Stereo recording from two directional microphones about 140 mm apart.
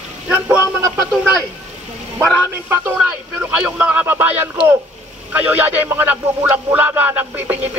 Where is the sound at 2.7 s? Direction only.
15° right (ahead or behind).